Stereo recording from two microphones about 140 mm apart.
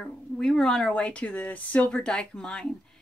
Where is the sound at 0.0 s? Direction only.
5° left (ahead or behind).